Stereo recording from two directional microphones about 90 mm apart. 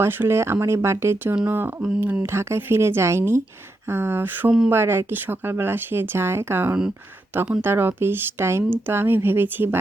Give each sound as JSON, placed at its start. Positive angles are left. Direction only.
{"t": 0.0, "sound": "speech", "side_deg": -25}